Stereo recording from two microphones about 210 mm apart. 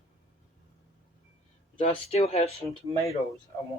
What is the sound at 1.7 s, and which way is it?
Speech, 30° left (ahead or behind).